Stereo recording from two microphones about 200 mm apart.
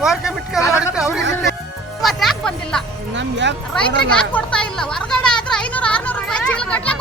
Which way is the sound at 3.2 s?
65° right (ahead or behind).